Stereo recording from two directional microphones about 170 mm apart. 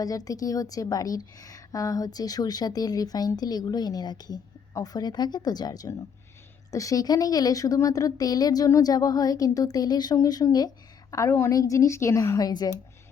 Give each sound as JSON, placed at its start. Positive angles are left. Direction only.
{"t": 0.0, "sound": "a woman's voice", "side_deg": 20}